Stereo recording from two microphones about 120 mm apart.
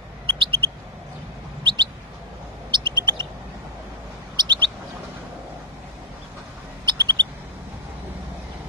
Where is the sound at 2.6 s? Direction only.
40° right (ahead or behind).